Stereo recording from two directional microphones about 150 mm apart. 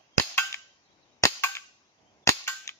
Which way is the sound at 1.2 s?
15° left (ahead or behind).